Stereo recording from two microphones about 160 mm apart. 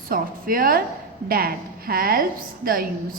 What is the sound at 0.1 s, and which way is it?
A woman's voice, 65° right (ahead or behind).